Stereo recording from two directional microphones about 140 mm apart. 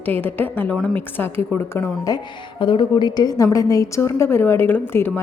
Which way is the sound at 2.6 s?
35° left (ahead or behind).